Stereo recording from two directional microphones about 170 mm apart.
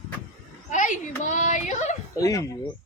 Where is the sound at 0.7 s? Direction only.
45° left (ahead or behind).